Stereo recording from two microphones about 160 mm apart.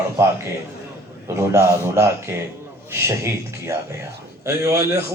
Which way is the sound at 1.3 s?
15° right (ahead or behind).